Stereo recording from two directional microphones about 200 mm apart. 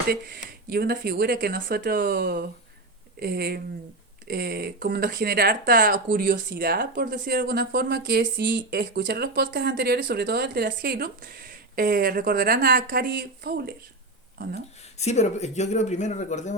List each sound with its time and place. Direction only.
0.7 s speech: 50° right (ahead or behind)
14.9 s speech: 35° left (ahead or behind)